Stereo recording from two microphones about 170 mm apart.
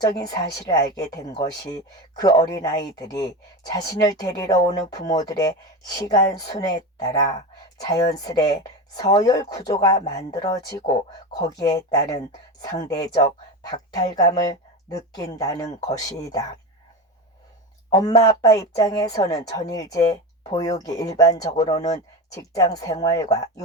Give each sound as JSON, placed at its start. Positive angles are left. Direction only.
{"t": 0.0, "sound": "speech", "side_deg": 20}
{"t": 17.9, "sound": "speech", "side_deg": 20}